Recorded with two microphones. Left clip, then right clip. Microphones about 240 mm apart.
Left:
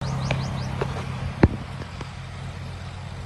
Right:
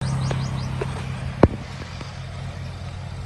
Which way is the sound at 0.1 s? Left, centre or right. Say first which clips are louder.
Left 3 dB; left.